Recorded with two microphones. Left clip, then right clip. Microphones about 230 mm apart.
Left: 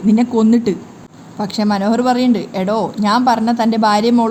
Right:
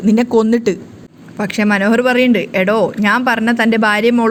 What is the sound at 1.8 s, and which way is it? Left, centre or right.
Speech, right.